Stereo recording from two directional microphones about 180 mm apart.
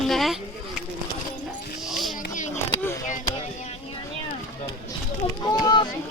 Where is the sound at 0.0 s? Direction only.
Centre (ahead or behind).